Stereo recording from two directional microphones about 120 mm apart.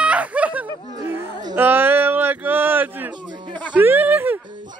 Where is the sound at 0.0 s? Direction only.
10° right (ahead or behind).